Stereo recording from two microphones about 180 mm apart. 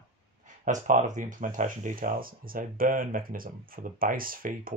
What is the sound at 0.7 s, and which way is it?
Speech, 45° right (ahead or behind).